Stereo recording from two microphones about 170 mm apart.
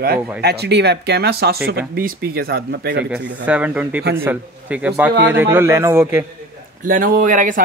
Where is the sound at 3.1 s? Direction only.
10° right (ahead or behind).